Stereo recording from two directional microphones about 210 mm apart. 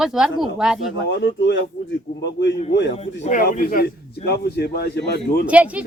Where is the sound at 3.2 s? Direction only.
40° left (ahead or behind).